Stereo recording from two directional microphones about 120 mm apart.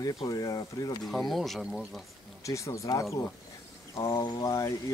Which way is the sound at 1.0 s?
Centre (ahead or behind).